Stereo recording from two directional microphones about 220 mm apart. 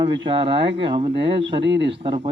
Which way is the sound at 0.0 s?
20° right (ahead or behind).